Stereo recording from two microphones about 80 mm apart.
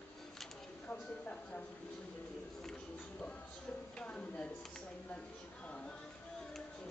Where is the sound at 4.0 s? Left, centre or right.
Centre.